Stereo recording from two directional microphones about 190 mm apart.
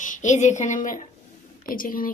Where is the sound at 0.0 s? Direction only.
40° left (ahead or behind).